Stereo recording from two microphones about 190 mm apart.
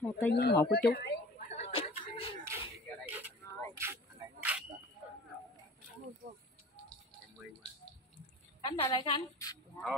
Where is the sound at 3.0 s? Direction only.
10° right (ahead or behind).